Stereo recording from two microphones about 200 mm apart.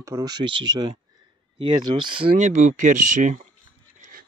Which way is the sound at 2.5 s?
40° right (ahead or behind).